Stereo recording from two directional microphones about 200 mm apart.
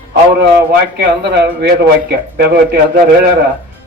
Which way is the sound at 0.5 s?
55° right (ahead or behind).